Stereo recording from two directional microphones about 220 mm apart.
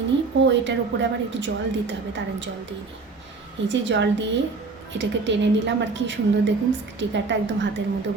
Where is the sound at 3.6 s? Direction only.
55° right (ahead or behind).